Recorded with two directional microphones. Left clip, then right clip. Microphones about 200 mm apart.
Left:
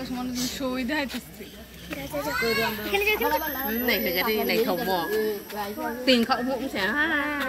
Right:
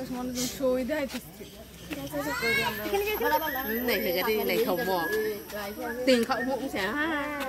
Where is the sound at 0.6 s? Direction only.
50° right (ahead or behind).